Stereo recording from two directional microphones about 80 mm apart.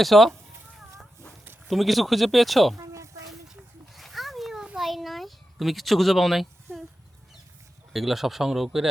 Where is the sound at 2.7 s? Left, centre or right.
Right.